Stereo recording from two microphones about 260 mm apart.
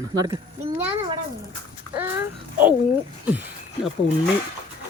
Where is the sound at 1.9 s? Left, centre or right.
Centre.